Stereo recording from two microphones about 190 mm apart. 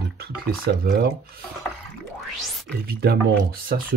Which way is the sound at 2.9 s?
55° right (ahead or behind).